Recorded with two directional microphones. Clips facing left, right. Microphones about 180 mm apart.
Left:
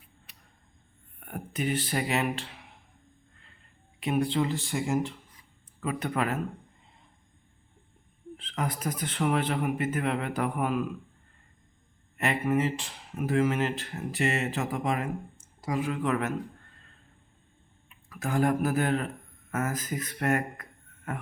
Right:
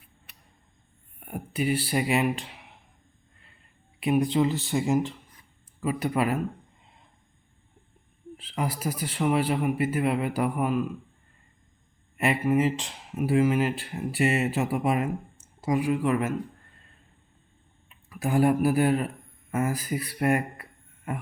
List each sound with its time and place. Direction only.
0.3 s a sound: 60° right (ahead or behind)
1.2 s speech: 10° right (ahead or behind)
4.2 s speech: 20° right (ahead or behind)
5.8 s speech: 5° right (ahead or behind)
8.4 s speech: 5° right (ahead or behind)
12.1 s a sound: 10° right (ahead or behind)
12.5 s speech: 20° right (ahead or behind)
18.1 s a man's voice: 15° right (ahead or behind)